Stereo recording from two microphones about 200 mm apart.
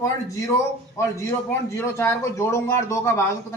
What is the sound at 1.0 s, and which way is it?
A man's voice, 15° left (ahead or behind).